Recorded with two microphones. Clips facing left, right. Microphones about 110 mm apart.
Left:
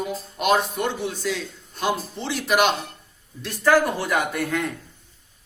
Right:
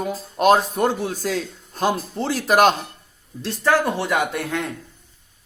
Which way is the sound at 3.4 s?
25° right (ahead or behind).